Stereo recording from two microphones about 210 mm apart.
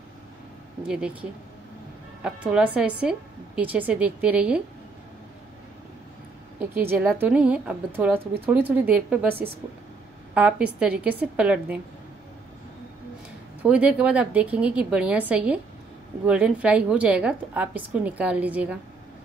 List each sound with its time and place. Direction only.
0.8 s a woman's voice: 5° right (ahead or behind)
2.2 s a woman's voice: 5° right (ahead or behind)
6.6 s a woman's voice: 10° right (ahead or behind)
13.6 s a woman's voice: 5° right (ahead or behind)